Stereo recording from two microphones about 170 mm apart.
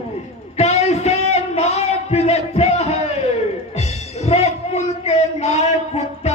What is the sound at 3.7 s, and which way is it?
Music, 40° left (ahead or behind).